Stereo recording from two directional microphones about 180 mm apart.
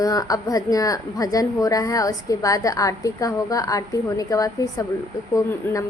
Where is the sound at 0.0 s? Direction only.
20° left (ahead or behind).